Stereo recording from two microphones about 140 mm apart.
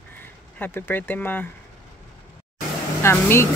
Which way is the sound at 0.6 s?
15° left (ahead or behind).